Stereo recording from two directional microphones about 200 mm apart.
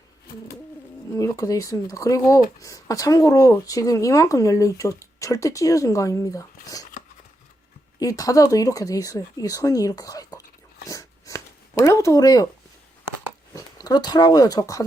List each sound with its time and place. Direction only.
1.1 s speech: 15° left (ahead or behind)
7.9 s speech: 20° left (ahead or behind)
10.8 s a sound: 15° left (ahead or behind)
13.5 s speech: 15° left (ahead or behind)